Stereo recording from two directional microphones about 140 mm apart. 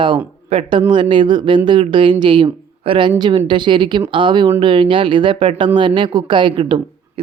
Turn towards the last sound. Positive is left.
turn(degrees=-35)  # may be behind; listen again after turning